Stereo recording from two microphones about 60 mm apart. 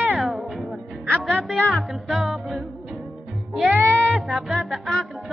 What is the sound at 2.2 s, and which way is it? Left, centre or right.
Music, centre.